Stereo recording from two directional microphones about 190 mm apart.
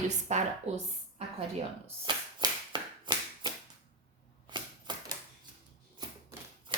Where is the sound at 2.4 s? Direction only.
25° right (ahead or behind).